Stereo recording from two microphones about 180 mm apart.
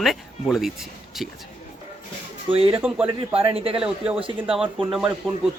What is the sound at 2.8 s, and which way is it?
Speech, 5° right (ahead or behind).